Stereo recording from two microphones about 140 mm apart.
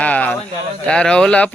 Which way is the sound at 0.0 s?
10° left (ahead or behind).